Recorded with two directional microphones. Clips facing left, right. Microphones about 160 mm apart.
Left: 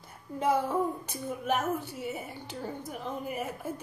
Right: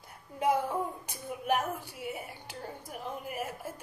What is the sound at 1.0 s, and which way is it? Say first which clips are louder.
A woman's voice: left 1 dB; 15° right (ahead or behind).